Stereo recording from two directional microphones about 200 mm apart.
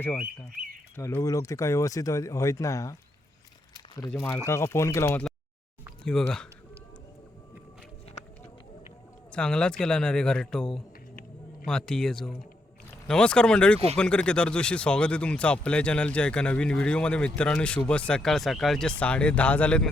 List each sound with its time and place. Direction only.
0.9 s speech: 10° left (ahead or behind)
4.1 s speech: 10° left (ahead or behind)
6.1 s speech: 5° left (ahead or behind)
9.3 s speech: 5° left (ahead or behind)